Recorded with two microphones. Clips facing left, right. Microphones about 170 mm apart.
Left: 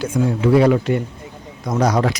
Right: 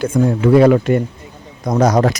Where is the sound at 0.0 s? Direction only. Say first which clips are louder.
Right 4 dB; 50° right (ahead or behind).